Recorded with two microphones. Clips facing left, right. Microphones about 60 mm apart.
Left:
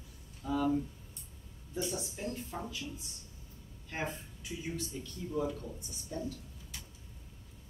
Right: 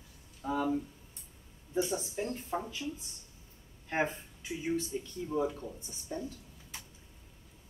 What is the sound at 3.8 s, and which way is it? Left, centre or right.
Speech, right.